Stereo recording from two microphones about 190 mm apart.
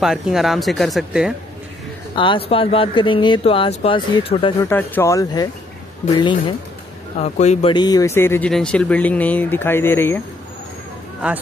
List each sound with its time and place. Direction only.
0.0 s speech: centre (ahead or behind)
2.1 s speech: 25° left (ahead or behind)
4.6 s speech: 10° left (ahead or behind)
7.2 s speech: 35° left (ahead or behind)
7.7 s speech: 20° left (ahead or behind)